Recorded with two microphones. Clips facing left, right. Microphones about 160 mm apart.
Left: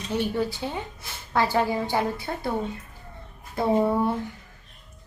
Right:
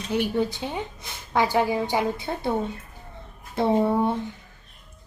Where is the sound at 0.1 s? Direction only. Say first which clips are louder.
Right 2 dB; 15° right (ahead or behind).